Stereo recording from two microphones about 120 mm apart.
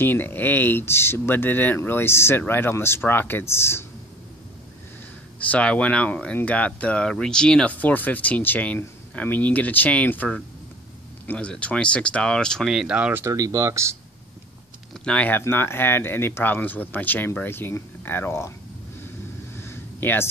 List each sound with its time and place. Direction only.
0.0 s speech: 15° left (ahead or behind)
5.5 s speech: 10° left (ahead or behind)
12.7 s speech: 10° right (ahead or behind)
13.2 s speech: 30° right (ahead or behind)
15.0 s speech: 10° left (ahead or behind)
19.7 s a sound: 20° left (ahead or behind)